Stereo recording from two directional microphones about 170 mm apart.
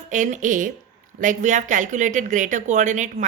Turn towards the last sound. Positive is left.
turn(degrees=-45)  # may be behind; listen again after turning